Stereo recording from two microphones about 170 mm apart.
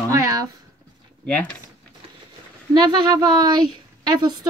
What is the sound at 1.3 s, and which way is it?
Speech, 5° left (ahead or behind).